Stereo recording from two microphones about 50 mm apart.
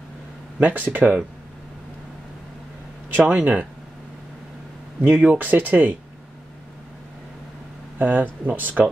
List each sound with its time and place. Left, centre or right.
0.6 s speech: right
3.3 s speech: right
5.0 s speech: right
8.0 s speech: right